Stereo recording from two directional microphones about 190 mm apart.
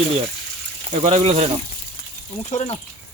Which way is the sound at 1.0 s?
35° right (ahead or behind).